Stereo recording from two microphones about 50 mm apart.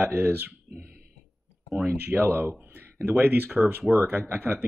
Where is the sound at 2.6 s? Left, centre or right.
Right.